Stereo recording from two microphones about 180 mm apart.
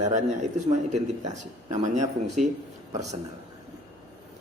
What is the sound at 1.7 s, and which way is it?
Speech, 40° right (ahead or behind).